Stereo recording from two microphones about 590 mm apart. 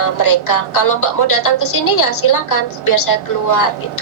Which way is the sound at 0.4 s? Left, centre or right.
Left.